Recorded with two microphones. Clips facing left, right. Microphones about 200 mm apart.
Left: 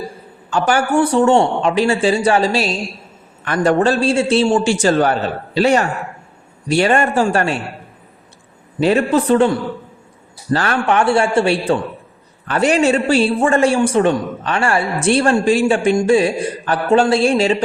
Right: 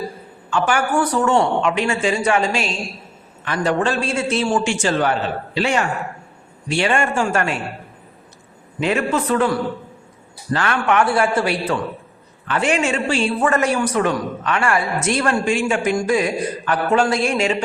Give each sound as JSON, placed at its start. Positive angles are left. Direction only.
{"t": 0.5, "sound": "a man's voice", "side_deg": 40}
{"t": 0.9, "sound": "a man's voice", "side_deg": 25}
{"t": 3.4, "sound": "a man's voice", "side_deg": 50}
{"t": 8.8, "sound": "a man's voice", "side_deg": 35}